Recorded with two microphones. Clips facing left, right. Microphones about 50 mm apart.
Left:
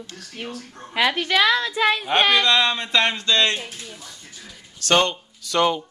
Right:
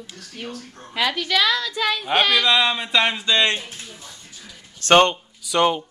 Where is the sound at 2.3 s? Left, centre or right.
Centre.